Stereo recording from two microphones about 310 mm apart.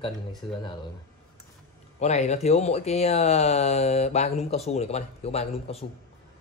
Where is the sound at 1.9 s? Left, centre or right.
Left.